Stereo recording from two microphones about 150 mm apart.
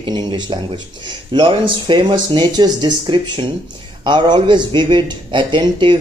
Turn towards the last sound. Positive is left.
turn(degrees=-35)  # may be behind; listen again after turning